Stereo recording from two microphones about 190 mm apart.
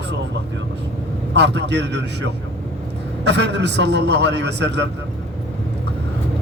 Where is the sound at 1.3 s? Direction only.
65° right (ahead or behind).